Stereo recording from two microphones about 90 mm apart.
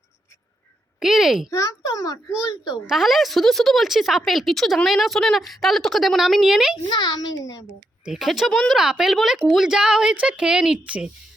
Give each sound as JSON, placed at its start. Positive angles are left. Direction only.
{"t": 0.9, "sound": "a sound", "side_deg": -5}
{"t": 1.5, "sound": "a child's voice", "side_deg": 40}
{"t": 2.7, "sound": "speech", "side_deg": -5}
{"t": 6.9, "sound": "a child's voice", "side_deg": 50}
{"t": 8.0, "sound": "a woman's voice", "side_deg": -5}